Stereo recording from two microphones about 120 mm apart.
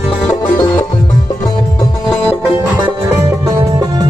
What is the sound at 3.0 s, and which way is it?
Music, 25° right (ahead or behind).